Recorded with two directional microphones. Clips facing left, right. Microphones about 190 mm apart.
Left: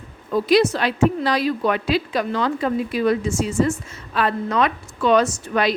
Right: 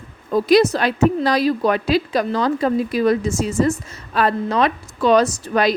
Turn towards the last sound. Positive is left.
turn(degrees=-40)  # may be behind; listen again after turning